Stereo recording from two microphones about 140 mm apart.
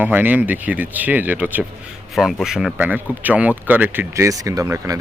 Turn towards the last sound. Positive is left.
turn(degrees=-25)  # may be behind; listen again after turning